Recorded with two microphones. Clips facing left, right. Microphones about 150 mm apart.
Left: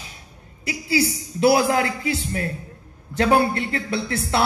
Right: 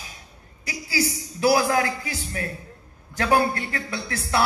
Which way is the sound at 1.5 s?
25° left (ahead or behind).